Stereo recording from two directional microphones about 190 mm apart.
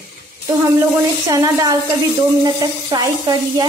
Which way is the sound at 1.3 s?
20° right (ahead or behind).